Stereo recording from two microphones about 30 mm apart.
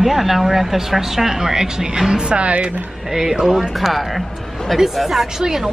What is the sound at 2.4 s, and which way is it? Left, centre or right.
Speech, right.